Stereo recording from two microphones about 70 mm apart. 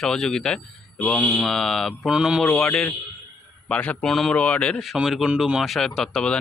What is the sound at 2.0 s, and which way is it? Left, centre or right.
Speech, centre.